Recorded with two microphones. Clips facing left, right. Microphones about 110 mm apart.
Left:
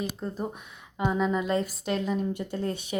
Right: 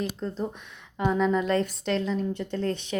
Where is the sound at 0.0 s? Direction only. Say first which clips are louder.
Right 2 dB; 10° left (ahead or behind).